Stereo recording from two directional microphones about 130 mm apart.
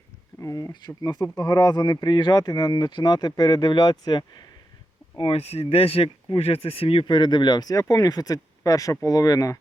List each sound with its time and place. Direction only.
0.3 s speech: 25° left (ahead or behind)
5.1 s speech: 45° left (ahead or behind); by 9.6 s 25° left (ahead or behind)